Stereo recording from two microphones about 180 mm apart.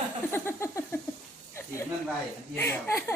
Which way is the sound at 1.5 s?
15° left (ahead or behind).